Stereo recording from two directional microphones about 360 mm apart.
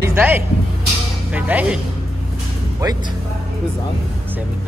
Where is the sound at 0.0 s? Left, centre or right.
Centre.